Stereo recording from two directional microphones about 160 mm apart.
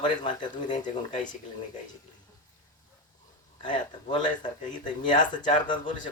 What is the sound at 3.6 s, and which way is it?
Speech, 30° left (ahead or behind).